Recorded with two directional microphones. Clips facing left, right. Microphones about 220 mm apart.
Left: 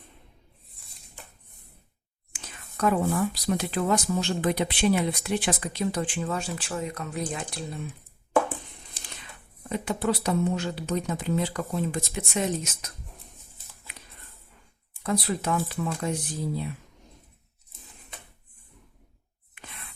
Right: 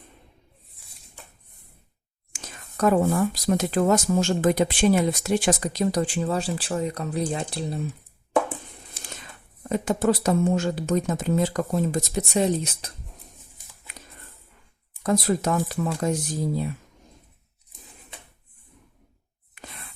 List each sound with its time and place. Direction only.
2.3 s speech: 40° right (ahead or behind)
9.6 s speech: 45° right (ahead or behind)
15.0 s speech: 45° right (ahead or behind)
19.5 s a sound: 40° right (ahead or behind)